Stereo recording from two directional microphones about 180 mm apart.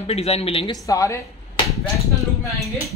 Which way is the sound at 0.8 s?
20° left (ahead or behind).